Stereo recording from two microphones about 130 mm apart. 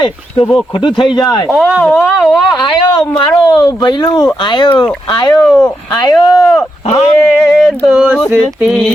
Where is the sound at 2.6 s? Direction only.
35° left (ahead or behind).